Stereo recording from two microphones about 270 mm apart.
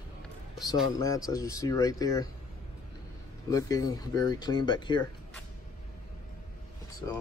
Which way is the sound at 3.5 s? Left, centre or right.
Centre.